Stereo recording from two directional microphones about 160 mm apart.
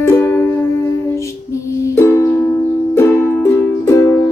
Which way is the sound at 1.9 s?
15° left (ahead or behind).